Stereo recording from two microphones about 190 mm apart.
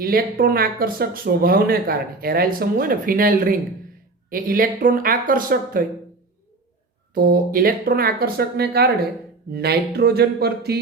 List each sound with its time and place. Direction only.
0.0 s speech: 50° right (ahead or behind)
7.1 s speech: 45° right (ahead or behind)